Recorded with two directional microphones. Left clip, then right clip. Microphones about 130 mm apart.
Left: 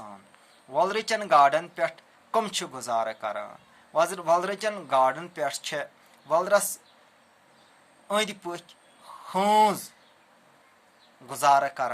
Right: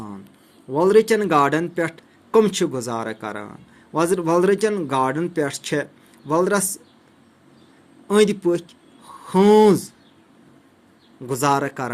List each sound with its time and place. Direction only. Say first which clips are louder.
0.7 s speech: right 9 dB; 25° right (ahead or behind)
8.0 s a man's voice: right 10 dB; 20° right (ahead or behind)
11.3 s speech: right 1 dB; 25° right (ahead or behind)